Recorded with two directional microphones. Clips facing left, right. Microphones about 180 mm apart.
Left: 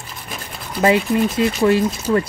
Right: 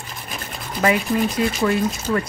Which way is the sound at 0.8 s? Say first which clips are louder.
Left 3 dB; 25° left (ahead or behind).